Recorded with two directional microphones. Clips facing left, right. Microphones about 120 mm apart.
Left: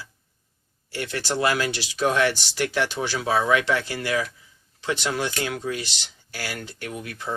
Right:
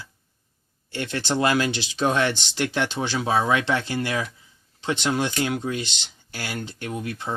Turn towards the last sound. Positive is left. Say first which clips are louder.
# right 3 dB
turn(degrees=-25)  # may be behind; listen again after turning